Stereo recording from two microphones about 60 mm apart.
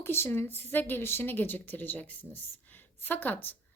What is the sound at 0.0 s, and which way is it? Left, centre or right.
A woman's voice, left.